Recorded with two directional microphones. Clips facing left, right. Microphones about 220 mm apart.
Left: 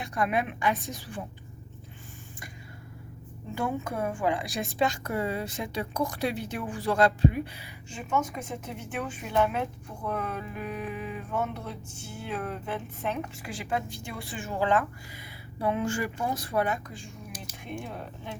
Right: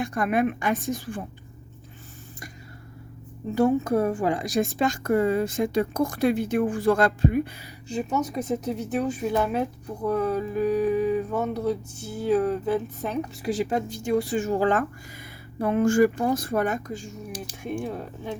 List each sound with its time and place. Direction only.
0.0 s a woman's voice: 50° right (ahead or behind)
3.5 s a woman's voice: 40° right (ahead or behind)
10.1 s a sound: 35° right (ahead or behind)
15.5 s a woman's voice: 45° right (ahead or behind)